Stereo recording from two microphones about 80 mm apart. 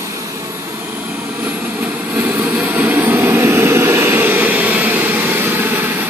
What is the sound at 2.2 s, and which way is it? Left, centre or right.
Vehicle, right.